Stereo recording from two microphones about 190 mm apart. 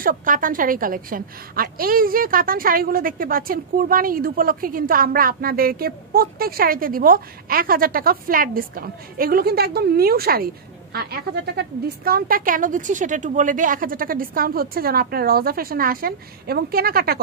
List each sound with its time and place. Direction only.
0.0 s a woman's voice: 45° right (ahead or behind)